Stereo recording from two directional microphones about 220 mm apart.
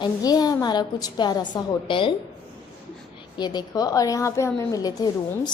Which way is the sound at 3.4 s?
20° left (ahead or behind).